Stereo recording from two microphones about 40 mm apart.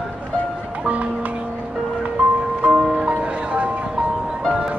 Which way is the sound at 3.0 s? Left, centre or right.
Right.